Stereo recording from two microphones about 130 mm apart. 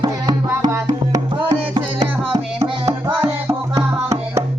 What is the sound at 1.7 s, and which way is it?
Music, 35° right (ahead or behind).